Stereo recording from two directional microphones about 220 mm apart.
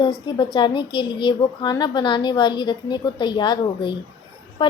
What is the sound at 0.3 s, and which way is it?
A woman's voice, 20° left (ahead or behind).